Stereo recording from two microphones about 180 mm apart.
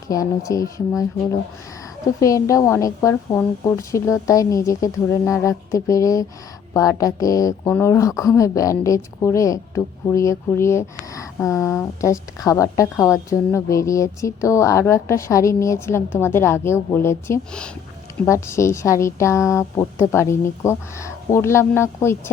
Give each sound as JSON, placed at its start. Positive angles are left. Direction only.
{"t": 0.1, "sound": "speech", "side_deg": 20}